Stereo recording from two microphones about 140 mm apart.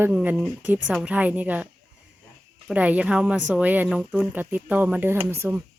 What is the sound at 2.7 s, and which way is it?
Speech, 10° right (ahead or behind).